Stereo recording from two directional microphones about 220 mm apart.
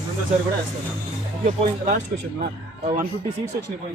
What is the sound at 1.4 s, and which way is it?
Speech, 35° right (ahead or behind).